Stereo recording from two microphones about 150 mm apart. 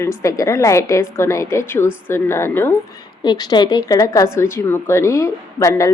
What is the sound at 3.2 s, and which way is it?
A woman's voice, 30° left (ahead or behind).